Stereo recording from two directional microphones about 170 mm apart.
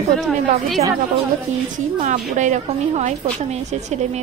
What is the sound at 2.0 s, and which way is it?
A woman's voice, 45° right (ahead or behind).